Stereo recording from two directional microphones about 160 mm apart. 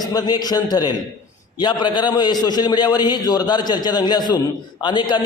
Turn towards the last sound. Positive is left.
turn(degrees=30)  # may be behind; listen again after turning